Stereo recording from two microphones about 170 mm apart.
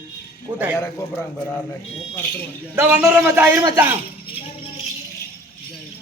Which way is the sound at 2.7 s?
10° right (ahead or behind).